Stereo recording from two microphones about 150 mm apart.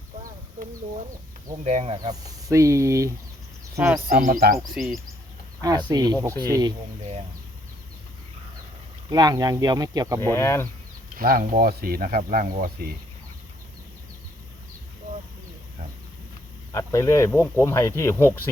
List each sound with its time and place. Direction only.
1.6 s speech: 45° right (ahead or behind)
2.0 s speech: 20° right (ahead or behind)
4.1 s speech: 70° right (ahead or behind)
4.5 s speech: centre (ahead or behind)
5.6 s speech: 25° right (ahead or behind)
9.0 s speech: 25° right (ahead or behind)
10.2 s speech: 20° left (ahead or behind)
11.2 s speech: 70° right (ahead or behind)
16.7 s speech: 20° left (ahead or behind)